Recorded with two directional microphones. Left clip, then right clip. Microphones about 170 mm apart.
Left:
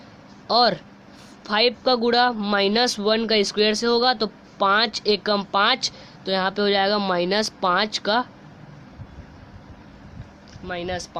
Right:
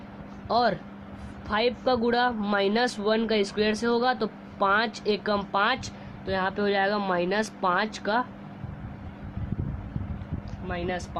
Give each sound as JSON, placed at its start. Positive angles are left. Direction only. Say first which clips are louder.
{"t": 0.4, "sound": "speech", "louder": "left 5 dB", "side_deg": 35}
{"t": 10.7, "sound": "speech", "louder": "left 3 dB", "side_deg": 45}